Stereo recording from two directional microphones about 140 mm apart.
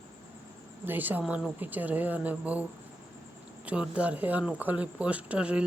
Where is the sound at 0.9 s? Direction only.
15° right (ahead or behind).